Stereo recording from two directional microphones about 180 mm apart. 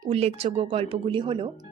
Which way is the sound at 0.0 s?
35° right (ahead or behind).